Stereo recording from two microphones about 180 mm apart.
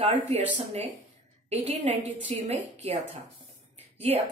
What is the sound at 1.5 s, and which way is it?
A woman's voice, 35° right (ahead or behind).